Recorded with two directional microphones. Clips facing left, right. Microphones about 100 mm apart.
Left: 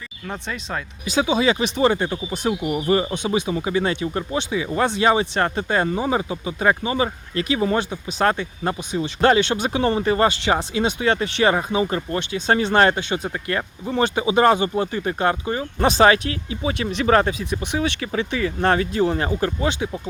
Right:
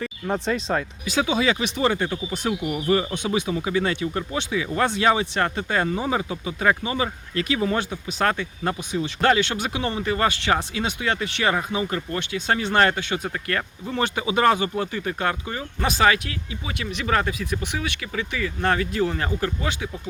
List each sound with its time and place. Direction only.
0.3 s speech: 35° right (ahead or behind)
1.0 s speech: 25° left (ahead or behind)